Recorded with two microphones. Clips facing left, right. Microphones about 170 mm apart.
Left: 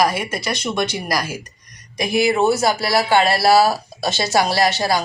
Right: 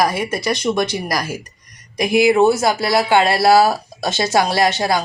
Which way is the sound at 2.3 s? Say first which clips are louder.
Right 3 dB; 15° right (ahead or behind).